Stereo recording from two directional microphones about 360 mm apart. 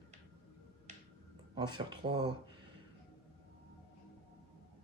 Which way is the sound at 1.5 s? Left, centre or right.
Centre.